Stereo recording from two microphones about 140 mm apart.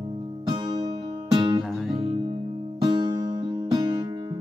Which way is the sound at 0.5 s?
30° right (ahead or behind).